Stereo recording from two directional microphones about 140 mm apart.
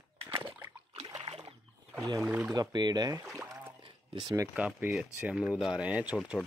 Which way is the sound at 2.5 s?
30° right (ahead or behind).